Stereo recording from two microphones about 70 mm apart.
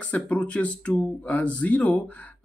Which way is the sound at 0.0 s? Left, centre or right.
Left.